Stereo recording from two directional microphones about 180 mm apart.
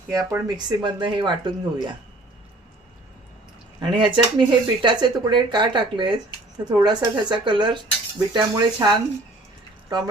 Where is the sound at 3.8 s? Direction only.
25° right (ahead or behind).